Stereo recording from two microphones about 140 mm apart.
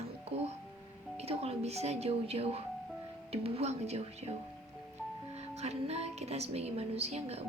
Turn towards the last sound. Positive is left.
turn(degrees=-50)  # may be behind; listen again after turning